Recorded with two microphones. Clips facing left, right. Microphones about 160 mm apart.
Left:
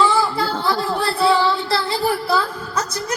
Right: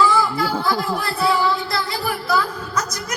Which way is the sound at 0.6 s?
30° left (ahead or behind).